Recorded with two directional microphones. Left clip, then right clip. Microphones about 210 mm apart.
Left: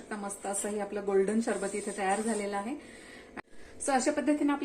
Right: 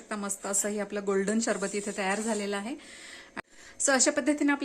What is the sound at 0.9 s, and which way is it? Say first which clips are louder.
A woman's voice: left 2 dB; 55° right (ahead or behind).